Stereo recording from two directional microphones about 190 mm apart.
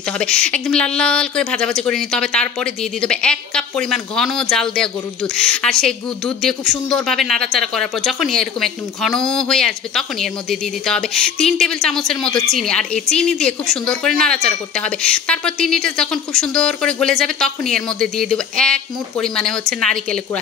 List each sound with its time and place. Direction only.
0.2 s speech: 5° left (ahead or behind)